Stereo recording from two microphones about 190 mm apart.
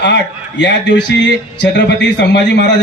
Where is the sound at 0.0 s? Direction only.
65° left (ahead or behind).